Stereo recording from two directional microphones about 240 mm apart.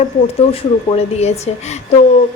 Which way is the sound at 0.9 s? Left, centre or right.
Left.